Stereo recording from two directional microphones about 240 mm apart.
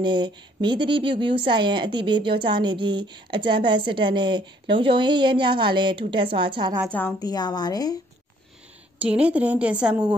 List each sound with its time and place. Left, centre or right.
0.0 s a woman's voice: centre
6.9 s a woman's voice: centre
8.9 s a woman's voice: centre